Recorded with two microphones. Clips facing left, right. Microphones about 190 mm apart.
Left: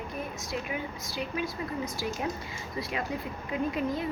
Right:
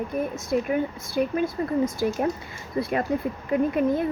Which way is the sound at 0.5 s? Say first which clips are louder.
Right 11 dB; 50° right (ahead or behind).